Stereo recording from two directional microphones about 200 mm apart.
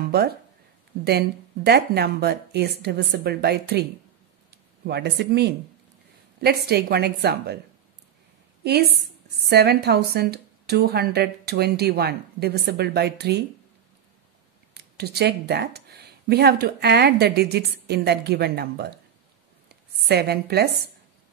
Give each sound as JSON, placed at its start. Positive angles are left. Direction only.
{"t": 1.0, "sound": "speech", "side_deg": -55}
{"t": 4.8, "sound": "speech", "side_deg": -55}
{"t": 9.5, "sound": "speech", "side_deg": -55}
{"t": 14.7, "sound": "speech", "side_deg": -55}
{"t": 19.7, "sound": "a sound", "side_deg": -55}